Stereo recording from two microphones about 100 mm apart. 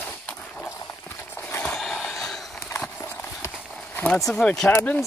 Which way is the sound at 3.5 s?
5° left (ahead or behind).